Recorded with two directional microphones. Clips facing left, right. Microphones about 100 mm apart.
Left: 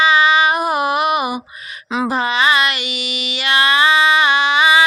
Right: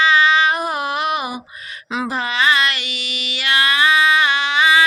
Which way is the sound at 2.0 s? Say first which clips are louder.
Left 3 dB; 25° left (ahead or behind).